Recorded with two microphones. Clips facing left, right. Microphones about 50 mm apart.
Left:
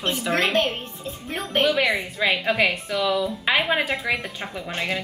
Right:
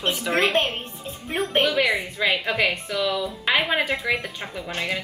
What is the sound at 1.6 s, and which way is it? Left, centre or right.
A woman's voice, centre.